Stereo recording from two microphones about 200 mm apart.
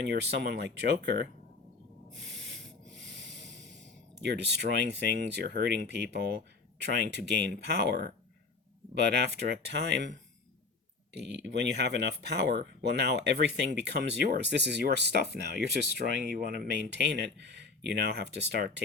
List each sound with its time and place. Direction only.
0.1 s speech: 55° right (ahead or behind)
2.1 s snort: 65° right (ahead or behind)
6.7 s speech: 55° right (ahead or behind)
11.4 s speech: 60° right (ahead or behind)